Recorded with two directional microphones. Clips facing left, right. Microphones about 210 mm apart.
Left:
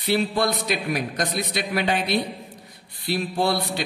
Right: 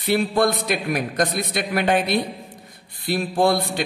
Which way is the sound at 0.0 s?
50° right (ahead or behind).